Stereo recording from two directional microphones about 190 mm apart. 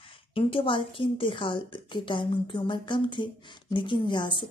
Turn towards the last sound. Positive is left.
turn(degrees=25)  # may be behind; listen again after turning